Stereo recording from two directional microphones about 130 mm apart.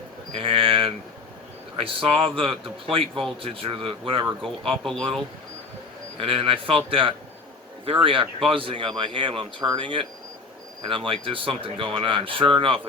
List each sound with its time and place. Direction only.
0.3 s speech: 45° right (ahead or behind)
4.8 s speech: 5° left (ahead or behind)
6.1 s speech: 45° right (ahead or behind)